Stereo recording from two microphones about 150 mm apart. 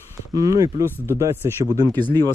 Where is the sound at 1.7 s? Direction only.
25° right (ahead or behind).